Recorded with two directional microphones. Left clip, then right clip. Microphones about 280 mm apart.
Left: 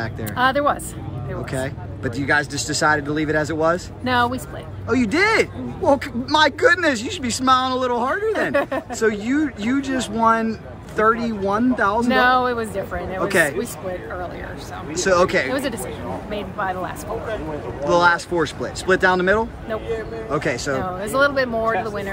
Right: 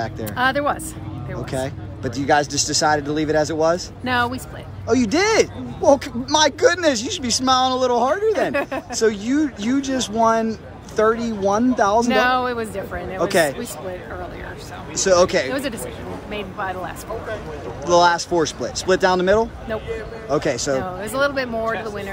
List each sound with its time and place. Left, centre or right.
0.0 s speech: centre
15.0 s speech: centre